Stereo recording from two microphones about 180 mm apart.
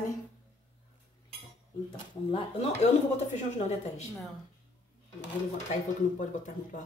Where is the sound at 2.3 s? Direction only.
35° left (ahead or behind).